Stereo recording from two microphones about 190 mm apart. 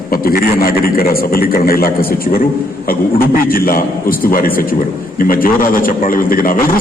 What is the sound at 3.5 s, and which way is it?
A man's voice, 50° left (ahead or behind).